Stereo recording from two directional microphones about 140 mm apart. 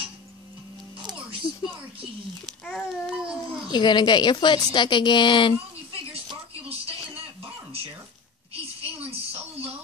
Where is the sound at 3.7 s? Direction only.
30° left (ahead or behind).